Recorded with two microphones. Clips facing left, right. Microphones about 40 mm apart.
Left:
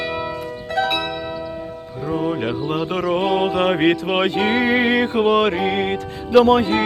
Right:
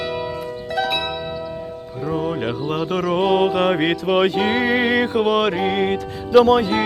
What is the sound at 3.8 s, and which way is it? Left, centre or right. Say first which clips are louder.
Music: even; centre.